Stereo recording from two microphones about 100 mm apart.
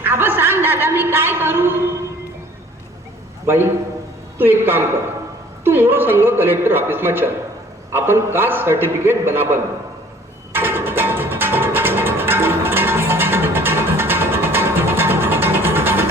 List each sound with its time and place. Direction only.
0.0 s a man's voice: 20° right (ahead or behind)
3.4 s a man's voice: 25° right (ahead or behind)
10.5 s music: 20° right (ahead or behind)